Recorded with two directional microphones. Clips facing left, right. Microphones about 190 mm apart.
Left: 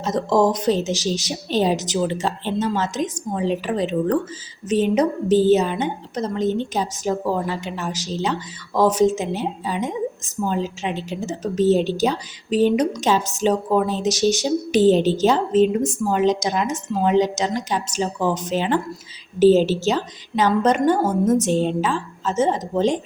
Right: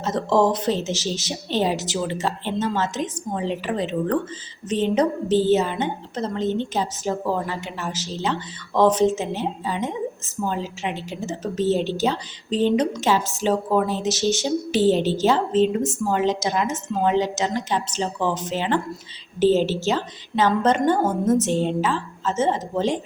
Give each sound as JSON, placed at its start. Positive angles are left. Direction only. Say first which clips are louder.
{"t": 0.0, "sound": "a woman's voice", "louder": "left 1 dB", "side_deg": 15}